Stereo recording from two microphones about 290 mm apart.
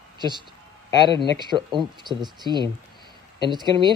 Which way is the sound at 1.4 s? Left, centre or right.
Centre.